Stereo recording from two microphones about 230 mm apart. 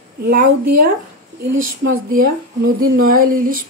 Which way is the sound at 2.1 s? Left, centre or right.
Right.